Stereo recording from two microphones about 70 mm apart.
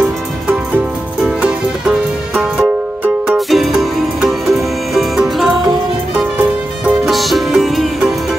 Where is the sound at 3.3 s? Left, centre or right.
Centre.